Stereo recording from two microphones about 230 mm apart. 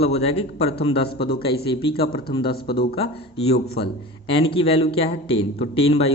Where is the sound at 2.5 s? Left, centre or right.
Left.